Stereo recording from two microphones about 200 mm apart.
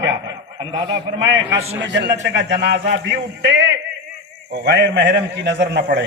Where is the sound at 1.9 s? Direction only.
60° right (ahead or behind).